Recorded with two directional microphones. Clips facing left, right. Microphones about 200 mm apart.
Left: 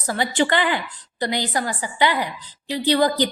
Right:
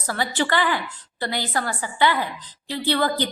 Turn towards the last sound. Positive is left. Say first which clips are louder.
# left 4 dB
turn(degrees=15)  # may be behind; listen again after turning